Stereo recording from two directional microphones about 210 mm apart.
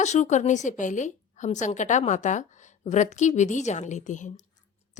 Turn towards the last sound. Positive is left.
turn(degrees=35)  # may be behind; listen again after turning